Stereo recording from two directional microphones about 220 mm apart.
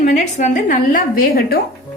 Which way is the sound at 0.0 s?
35° left (ahead or behind).